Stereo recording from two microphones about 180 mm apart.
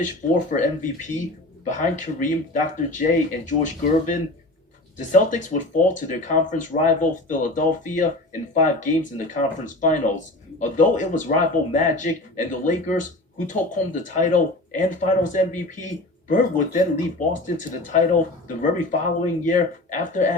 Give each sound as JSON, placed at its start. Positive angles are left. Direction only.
{"t": 0.0, "sound": "speech", "side_deg": 45}